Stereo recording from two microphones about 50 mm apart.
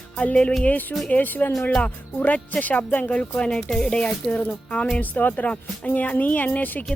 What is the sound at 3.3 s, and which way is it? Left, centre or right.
Speech, centre.